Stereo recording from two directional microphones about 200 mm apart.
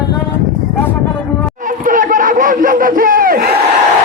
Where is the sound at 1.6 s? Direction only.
40° right (ahead or behind).